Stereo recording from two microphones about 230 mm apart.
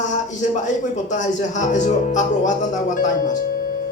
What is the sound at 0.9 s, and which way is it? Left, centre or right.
Speech, left.